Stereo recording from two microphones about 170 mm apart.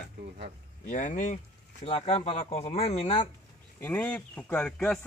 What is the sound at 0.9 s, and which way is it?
Speech, 50° left (ahead or behind).